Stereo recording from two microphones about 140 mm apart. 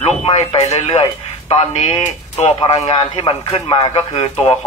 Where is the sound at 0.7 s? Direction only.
50° left (ahead or behind).